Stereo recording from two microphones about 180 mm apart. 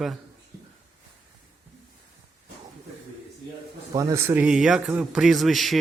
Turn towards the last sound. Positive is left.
turn(degrees=0)  # may be behind; listen again after turning